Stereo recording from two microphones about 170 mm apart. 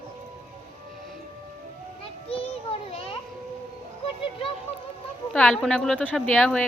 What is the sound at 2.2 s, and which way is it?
Children playing, 35° left (ahead or behind).